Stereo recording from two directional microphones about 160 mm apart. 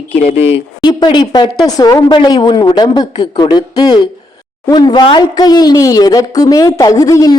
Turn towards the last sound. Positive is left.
turn(degrees=20)  # may be behind; listen again after turning